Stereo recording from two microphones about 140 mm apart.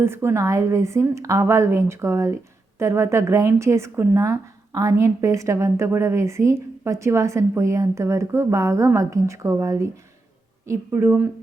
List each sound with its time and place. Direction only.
0.0 s a woman's voice: 15° right (ahead or behind)